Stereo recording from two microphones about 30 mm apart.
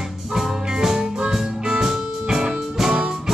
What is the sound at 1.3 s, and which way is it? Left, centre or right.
Music, right.